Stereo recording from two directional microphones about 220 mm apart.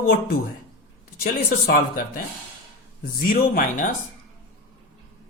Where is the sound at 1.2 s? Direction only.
40° left (ahead or behind).